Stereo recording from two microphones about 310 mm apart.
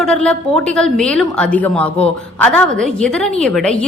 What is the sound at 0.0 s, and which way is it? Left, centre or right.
A woman's voice, centre.